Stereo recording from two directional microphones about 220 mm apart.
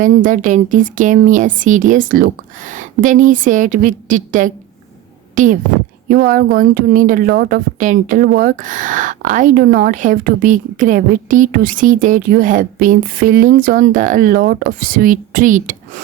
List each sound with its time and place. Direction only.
0.0 s a woman's voice: 35° right (ahead or behind)